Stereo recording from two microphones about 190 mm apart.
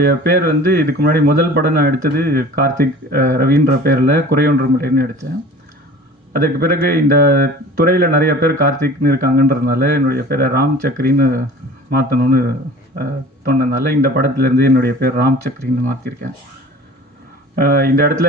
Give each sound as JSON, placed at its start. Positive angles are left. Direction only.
{"t": 0.0, "sound": "speech", "side_deg": -55}
{"t": 6.3, "sound": "speech", "side_deg": -50}
{"t": 17.5, "sound": "speech", "side_deg": -50}